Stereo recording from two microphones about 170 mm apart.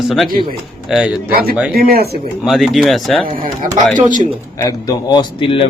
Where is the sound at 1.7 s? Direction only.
60° right (ahead or behind).